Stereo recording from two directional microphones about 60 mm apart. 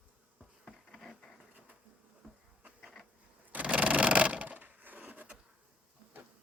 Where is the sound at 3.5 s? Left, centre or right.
Right.